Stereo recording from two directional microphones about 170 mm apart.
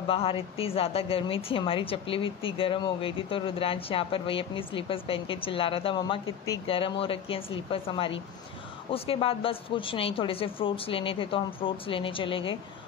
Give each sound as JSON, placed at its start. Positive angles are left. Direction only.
{"t": 0.0, "sound": "a woman's voice", "side_deg": 35}